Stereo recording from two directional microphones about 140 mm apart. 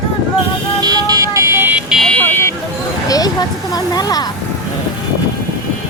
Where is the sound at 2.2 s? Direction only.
15° left (ahead or behind).